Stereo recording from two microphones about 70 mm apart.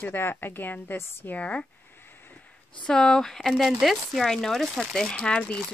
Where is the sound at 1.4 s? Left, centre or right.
Centre.